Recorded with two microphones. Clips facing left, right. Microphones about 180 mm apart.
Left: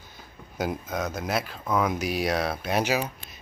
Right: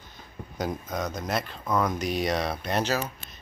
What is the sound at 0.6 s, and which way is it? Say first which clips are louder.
Speech: left 1 dB; 5° left (ahead or behind).